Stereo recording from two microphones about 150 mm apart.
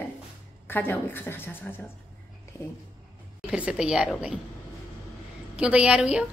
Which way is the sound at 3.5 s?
5° right (ahead or behind).